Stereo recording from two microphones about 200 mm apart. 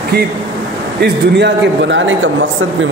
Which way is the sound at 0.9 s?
60° right (ahead or behind).